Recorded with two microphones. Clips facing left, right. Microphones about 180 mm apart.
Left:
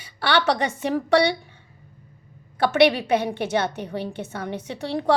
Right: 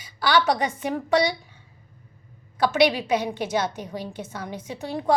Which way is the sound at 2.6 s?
60° left (ahead or behind).